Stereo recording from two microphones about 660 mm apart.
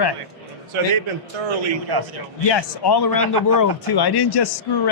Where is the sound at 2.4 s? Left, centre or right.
Left.